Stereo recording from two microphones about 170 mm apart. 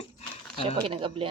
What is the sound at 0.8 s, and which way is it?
Speech, 30° right (ahead or behind).